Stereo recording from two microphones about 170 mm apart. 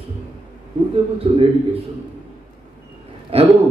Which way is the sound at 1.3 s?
35° right (ahead or behind).